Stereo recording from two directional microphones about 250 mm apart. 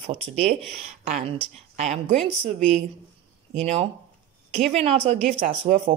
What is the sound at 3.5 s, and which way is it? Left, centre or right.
Speech, right.